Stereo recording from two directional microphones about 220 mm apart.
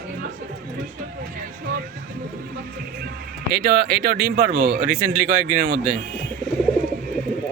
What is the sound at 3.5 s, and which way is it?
Speech, 45° right (ahead or behind).